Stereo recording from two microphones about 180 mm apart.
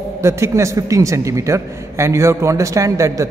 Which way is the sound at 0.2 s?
15° right (ahead or behind).